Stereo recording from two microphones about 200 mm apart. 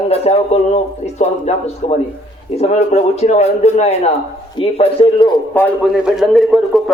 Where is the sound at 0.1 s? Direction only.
30° left (ahead or behind).